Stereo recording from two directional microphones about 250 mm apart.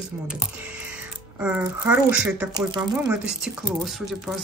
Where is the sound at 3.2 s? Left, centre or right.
Centre.